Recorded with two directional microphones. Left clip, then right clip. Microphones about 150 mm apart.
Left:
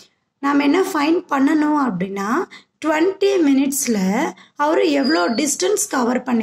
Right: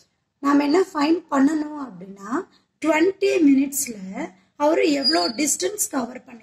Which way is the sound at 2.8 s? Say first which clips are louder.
Left 2 dB; 45° left (ahead or behind).